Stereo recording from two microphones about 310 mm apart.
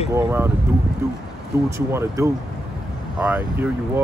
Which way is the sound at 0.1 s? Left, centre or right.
Centre.